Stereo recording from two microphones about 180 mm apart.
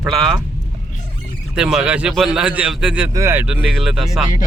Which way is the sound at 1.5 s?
5° right (ahead or behind).